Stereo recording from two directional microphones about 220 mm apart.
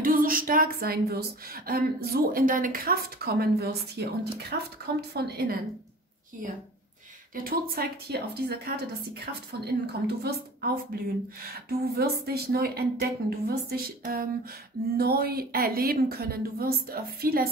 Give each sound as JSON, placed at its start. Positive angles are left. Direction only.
{"t": 0.0, "sound": "speech", "side_deg": -40}
{"t": 7.4, "sound": "speech", "side_deg": -45}